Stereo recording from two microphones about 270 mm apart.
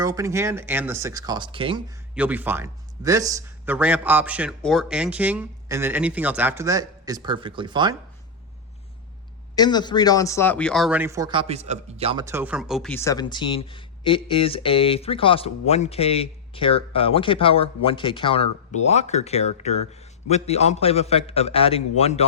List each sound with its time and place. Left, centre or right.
0.0 s a man's voice: centre
2.1 s a man's voice: centre
9.6 s speech: centre